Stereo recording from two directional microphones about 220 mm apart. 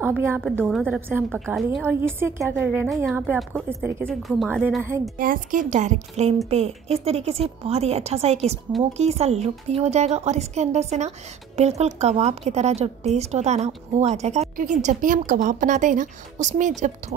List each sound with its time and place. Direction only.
0.2 s a woman's voice: 10° right (ahead or behind)
5.1 s a woman's voice: 40° right (ahead or behind)